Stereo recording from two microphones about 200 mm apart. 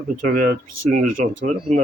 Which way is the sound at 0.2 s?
45° right (ahead or behind).